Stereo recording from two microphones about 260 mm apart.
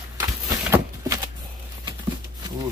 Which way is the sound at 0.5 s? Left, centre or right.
Centre.